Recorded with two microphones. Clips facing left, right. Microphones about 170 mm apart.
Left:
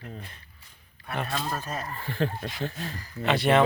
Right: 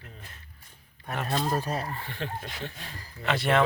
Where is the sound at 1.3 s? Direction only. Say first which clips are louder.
Right 4 dB; 35° right (ahead or behind).